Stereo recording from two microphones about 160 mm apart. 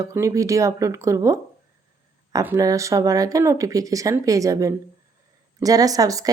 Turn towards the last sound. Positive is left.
turn(degrees=-20)  # may be behind; listen again after turning